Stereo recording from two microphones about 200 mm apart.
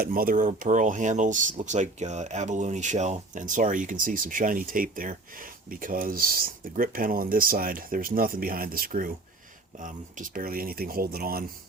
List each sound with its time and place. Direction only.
0.0 s speech: 45° right (ahead or behind)